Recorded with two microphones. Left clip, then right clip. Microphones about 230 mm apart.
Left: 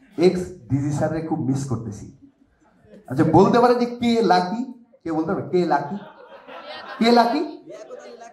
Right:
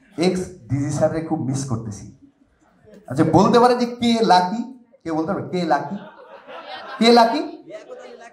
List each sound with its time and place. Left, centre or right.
0.1 s a man's voice: right
3.1 s a man's voice: right
6.6 s chatter: left
7.0 s a man's voice: right
7.7 s a sound: centre